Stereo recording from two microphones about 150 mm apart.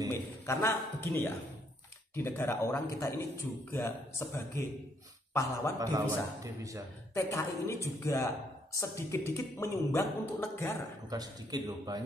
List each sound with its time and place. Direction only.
0.5 s a woman's voice: 15° left (ahead or behind)
5.8 s a man's voice: 20° right (ahead or behind)
7.2 s a woman's voice: 20° left (ahead or behind)
11.1 s a man's voice: 25° right (ahead or behind)